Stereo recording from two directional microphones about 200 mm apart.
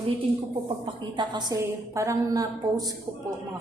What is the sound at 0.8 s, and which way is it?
A woman's voice, 20° right (ahead or behind).